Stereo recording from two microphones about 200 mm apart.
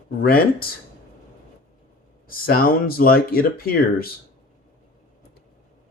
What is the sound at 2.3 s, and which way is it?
Speech, 45° left (ahead or behind).